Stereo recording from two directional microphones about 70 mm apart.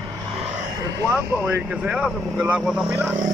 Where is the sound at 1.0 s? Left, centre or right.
Centre.